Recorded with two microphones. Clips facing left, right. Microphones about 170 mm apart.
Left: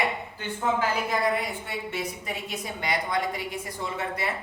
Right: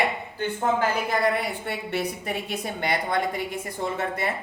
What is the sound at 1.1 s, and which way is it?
A woman's voice, 65° right (ahead or behind).